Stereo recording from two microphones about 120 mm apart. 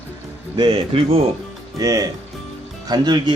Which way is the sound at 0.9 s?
55° right (ahead or behind).